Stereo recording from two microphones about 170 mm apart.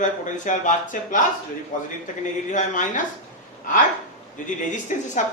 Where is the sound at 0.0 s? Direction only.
45° left (ahead or behind).